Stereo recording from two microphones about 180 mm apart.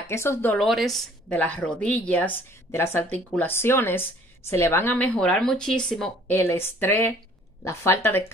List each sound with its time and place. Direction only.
0.0 s a woman's voice: 15° left (ahead or behind)
6.3 s a woman's voice: 15° left (ahead or behind)